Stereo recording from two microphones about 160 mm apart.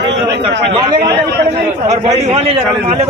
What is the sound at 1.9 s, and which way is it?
Speech, 45° right (ahead or behind).